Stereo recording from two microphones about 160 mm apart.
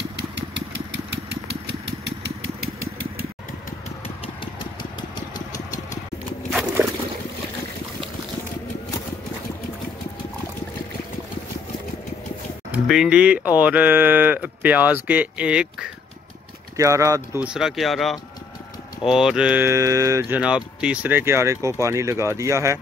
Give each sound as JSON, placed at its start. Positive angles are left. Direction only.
{"t": 12.7, "sound": "speech", "side_deg": 0}
{"t": 16.7, "sound": "speech", "side_deg": -20}
{"t": 20.3, "sound": "speech", "side_deg": -5}